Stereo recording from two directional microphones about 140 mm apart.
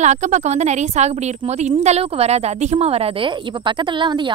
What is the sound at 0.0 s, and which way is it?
A woman's voice, 60° right (ahead or behind).